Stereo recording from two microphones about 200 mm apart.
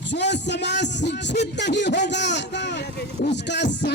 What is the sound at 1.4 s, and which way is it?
A man's voice, 60° left (ahead or behind).